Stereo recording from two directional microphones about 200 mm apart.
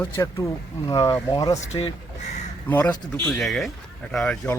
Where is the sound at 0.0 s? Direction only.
15° left (ahead or behind).